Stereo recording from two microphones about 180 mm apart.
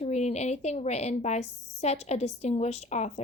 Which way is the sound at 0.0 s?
40° left (ahead or behind).